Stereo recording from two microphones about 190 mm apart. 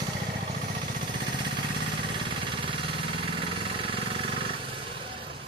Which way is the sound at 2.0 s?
25° right (ahead or behind).